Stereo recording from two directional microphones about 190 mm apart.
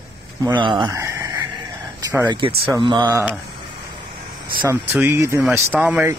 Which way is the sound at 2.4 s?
30° right (ahead or behind).